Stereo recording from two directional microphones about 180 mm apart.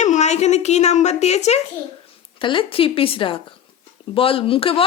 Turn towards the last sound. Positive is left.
turn(degrees=30)  # may be behind; listen again after turning